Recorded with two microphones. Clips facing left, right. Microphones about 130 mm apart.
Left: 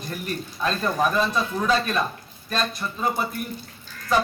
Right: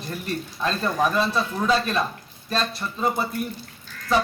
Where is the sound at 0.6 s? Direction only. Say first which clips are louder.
Even; 5° left (ahead or behind).